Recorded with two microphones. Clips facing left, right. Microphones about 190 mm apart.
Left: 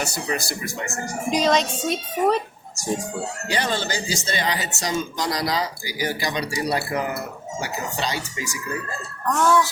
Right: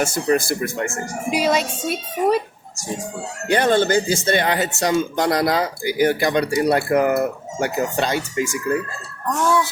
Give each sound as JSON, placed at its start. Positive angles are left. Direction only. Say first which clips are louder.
{"t": 0.0, "sound": "speech", "louder": "right 8 dB", "side_deg": -50}
{"t": 1.3, "sound": "a woman's voice", "louder": "right 1 dB", "side_deg": -10}
{"t": 3.4, "sound": "speech", "louder": "right 10 dB", "side_deg": -55}
{"t": 9.3, "sound": "a woman's voice", "louder": "even", "side_deg": -15}